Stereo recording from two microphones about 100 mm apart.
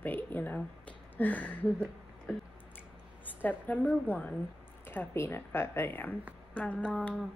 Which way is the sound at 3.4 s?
15° left (ahead or behind).